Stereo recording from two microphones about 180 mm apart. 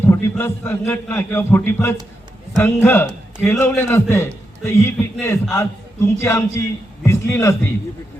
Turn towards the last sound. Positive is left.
turn(degrees=15)  # may be behind; listen again after turning